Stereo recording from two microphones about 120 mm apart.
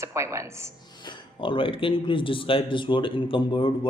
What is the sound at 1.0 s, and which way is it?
Speech, 45° left (ahead or behind).